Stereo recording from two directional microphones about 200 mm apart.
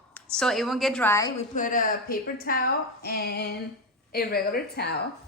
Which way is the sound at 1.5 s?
40° left (ahead or behind).